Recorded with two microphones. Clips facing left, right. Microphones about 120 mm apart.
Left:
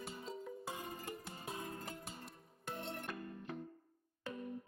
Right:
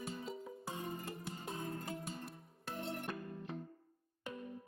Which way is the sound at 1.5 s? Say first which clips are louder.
Right 2 dB; 25° right (ahead or behind).